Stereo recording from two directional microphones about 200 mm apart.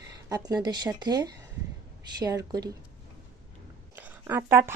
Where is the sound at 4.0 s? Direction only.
10° right (ahead or behind).